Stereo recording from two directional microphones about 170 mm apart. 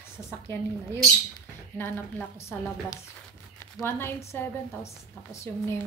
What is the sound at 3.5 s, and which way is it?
A woman's voice, 15° left (ahead or behind).